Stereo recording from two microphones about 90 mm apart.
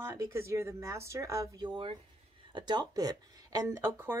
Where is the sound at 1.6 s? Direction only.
70° right (ahead or behind).